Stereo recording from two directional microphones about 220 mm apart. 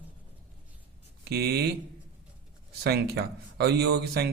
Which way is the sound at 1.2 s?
45° right (ahead or behind).